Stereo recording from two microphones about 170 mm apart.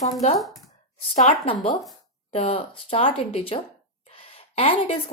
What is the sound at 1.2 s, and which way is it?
Speech, 35° left (ahead or behind).